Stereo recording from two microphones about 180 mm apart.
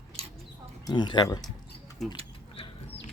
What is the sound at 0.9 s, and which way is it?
Speech, 25° left (ahead or behind).